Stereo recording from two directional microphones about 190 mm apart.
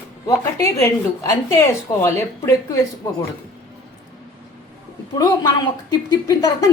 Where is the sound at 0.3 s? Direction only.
15° left (ahead or behind).